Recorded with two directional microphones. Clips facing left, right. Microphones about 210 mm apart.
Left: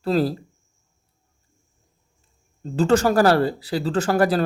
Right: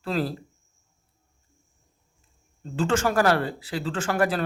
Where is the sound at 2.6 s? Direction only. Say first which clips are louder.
Left 6 dB; 40° left (ahead or behind).